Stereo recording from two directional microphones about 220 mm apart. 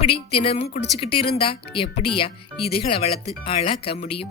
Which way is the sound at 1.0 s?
25° left (ahead or behind).